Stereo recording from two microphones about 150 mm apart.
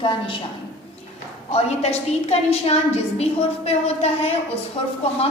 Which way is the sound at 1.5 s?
45° left (ahead or behind).